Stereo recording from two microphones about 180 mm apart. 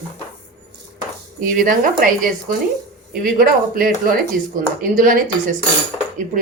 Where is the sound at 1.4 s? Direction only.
50° right (ahead or behind).